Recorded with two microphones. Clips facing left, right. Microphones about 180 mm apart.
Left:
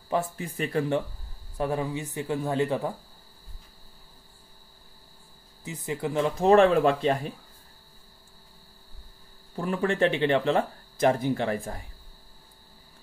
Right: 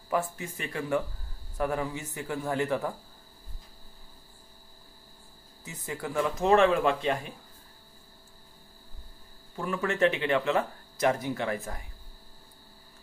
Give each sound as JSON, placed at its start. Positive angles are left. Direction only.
{"t": 0.1, "sound": "speech", "side_deg": 30}
{"t": 5.6, "sound": "speech", "side_deg": 20}
{"t": 6.4, "sound": "speech", "side_deg": 35}
{"t": 9.6, "sound": "speech", "side_deg": 35}